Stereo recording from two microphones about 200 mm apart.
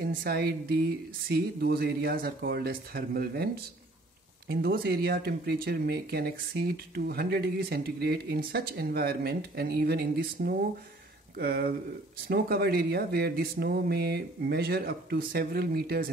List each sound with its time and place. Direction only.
0.0 s speech: 50° right (ahead or behind)
4.5 s speech: 50° right (ahead or behind)